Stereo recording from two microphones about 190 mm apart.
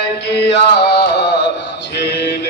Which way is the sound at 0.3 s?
65° left (ahead or behind).